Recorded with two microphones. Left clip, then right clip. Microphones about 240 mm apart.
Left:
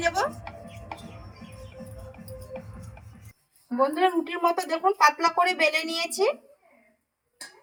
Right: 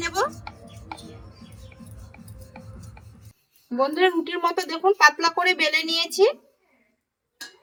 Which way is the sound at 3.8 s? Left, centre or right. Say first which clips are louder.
Right 2 dB; centre.